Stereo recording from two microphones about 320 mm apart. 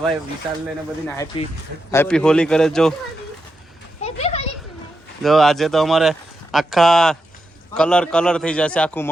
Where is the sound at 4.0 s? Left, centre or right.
Centre.